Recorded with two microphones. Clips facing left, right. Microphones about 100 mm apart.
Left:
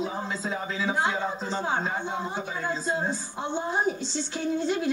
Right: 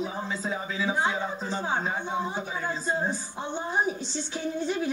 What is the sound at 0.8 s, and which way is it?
Speech, 10° right (ahead or behind).